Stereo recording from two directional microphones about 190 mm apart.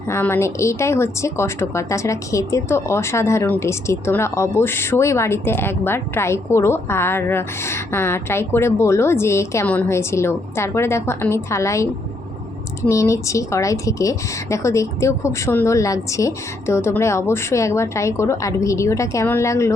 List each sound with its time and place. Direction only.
0.1 s speech: 15° left (ahead or behind)
12.9 s speech: 15° left (ahead or behind)